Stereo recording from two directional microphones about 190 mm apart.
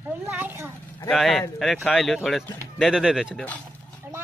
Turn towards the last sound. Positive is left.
turn(degrees=-5)  # may be behind; listen again after turning